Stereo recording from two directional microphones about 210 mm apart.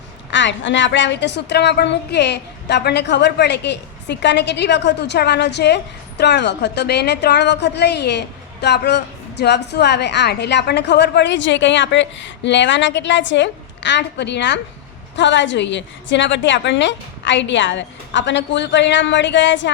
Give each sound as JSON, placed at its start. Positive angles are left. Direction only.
{"t": 0.3, "sound": "a woman's voice", "side_deg": 60}